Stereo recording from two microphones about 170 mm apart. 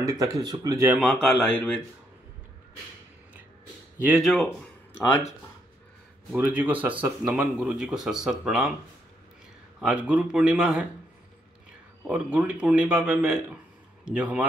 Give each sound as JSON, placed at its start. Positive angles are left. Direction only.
{"t": 0.0, "sound": "speech", "side_deg": -20}
{"t": 0.8, "sound": "speech", "side_deg": 0}
{"t": 4.0, "sound": "speech", "side_deg": 0}
{"t": 6.3, "sound": "speech", "side_deg": -10}
{"t": 9.8, "sound": "speech", "side_deg": -5}
{"t": 12.0, "sound": "a man's voice", "side_deg": -5}